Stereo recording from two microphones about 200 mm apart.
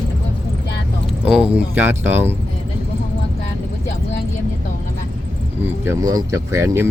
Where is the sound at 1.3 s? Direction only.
5° right (ahead or behind).